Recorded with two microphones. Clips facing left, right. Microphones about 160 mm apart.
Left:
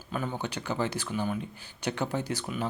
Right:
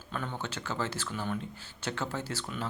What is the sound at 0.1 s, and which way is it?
A man's voice, 10° left (ahead or behind).